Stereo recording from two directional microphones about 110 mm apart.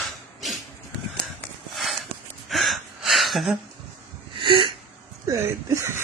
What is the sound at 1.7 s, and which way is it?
Walk, centre (ahead or behind).